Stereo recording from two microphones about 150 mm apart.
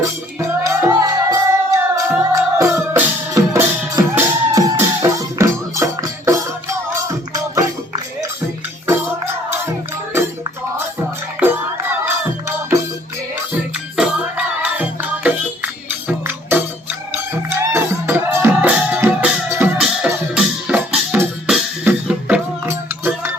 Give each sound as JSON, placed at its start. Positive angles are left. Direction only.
{"t": 0.0, "sound": "music", "side_deg": -20}
{"t": 19.8, "sound": "music", "side_deg": -5}